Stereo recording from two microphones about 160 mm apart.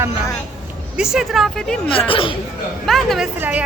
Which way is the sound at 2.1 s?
35° left (ahead or behind).